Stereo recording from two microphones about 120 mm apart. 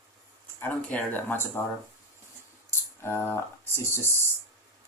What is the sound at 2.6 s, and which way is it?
Music, 20° left (ahead or behind).